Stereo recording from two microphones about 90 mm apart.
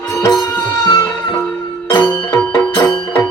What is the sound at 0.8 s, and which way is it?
Music, 50° left (ahead or behind).